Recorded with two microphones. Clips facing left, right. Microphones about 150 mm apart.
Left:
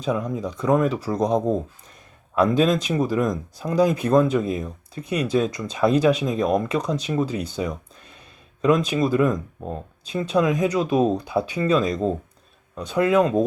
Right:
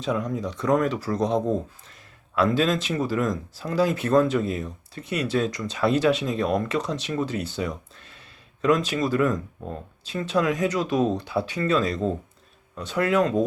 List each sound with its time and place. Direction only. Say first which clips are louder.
0.3 s speech: left 2 dB; 10° left (ahead or behind)